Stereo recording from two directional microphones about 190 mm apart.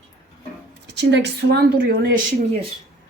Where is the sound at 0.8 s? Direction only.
65° right (ahead or behind); by 2.4 s 45° right (ahead or behind).